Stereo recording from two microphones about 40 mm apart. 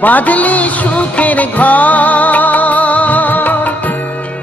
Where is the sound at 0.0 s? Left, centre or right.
Left.